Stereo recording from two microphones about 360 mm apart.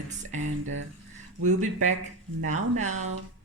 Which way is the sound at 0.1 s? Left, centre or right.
Centre.